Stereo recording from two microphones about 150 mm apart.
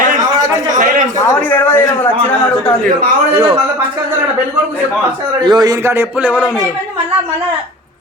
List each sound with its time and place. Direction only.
1.3 s a sound: 15° left (ahead or behind)
3.3 s a man's voice: 35° right (ahead or behind)
5.5 s a man's voice: 25° right (ahead or behind); by 6.5 s 10° right (ahead or behind)